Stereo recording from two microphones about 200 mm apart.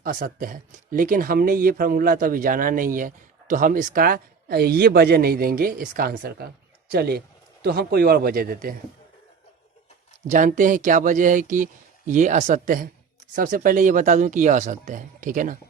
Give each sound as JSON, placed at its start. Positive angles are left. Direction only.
{"t": 0.0, "sound": "speech", "side_deg": -45}
{"t": 10.2, "sound": "speech", "side_deg": -40}